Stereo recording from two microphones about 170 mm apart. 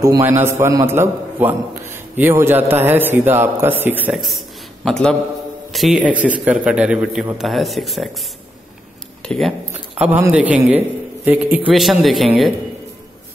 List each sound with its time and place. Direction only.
0.0 s a man's voice: 20° right (ahead or behind); by 8.1 s centre (ahead or behind)
9.2 s speech: 5° left (ahead or behind)
9.9 s a man's voice: 10° right (ahead or behind)